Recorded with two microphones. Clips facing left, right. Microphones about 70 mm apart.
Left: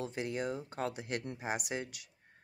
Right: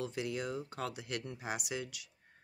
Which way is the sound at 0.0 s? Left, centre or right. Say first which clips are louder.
Left 1 dB; left.